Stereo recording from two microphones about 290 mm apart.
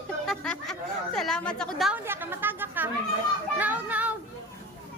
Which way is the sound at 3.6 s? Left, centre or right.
Centre.